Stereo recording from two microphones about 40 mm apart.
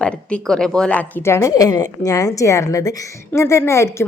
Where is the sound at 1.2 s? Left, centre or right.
Left.